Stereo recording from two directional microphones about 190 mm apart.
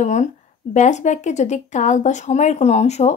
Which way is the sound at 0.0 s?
40° left (ahead or behind).